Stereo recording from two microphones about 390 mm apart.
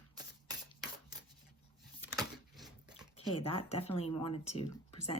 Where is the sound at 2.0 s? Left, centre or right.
Centre.